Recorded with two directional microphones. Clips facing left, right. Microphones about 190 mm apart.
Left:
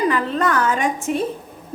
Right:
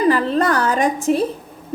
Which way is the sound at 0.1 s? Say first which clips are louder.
Right 3 dB; 35° right (ahead or behind).